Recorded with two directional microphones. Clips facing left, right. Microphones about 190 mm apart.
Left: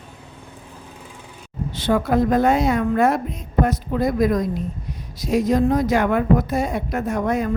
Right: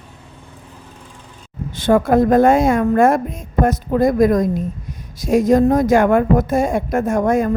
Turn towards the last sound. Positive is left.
turn(degrees=-45)  # may be behind; listen again after turning